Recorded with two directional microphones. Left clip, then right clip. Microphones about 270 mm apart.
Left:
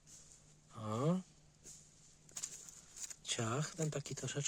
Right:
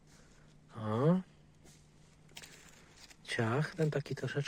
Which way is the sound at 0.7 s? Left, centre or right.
Centre.